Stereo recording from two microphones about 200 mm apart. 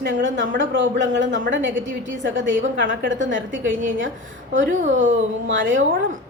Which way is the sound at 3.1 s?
70° right (ahead or behind).